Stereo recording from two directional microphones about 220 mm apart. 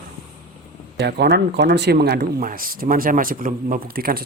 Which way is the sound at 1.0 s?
50° right (ahead or behind).